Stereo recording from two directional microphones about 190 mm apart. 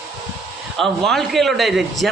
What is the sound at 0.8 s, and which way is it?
A man's voice, centre (ahead or behind).